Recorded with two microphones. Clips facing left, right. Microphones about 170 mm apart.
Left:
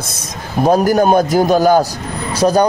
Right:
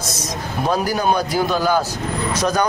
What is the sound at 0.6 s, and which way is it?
A man's voice, 45° left (ahead or behind).